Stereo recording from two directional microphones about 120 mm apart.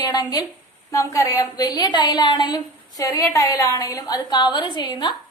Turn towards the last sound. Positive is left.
turn(degrees=40)  # may be behind; listen again after turning